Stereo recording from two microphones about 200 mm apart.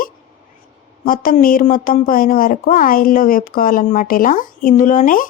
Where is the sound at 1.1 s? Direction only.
45° left (ahead or behind).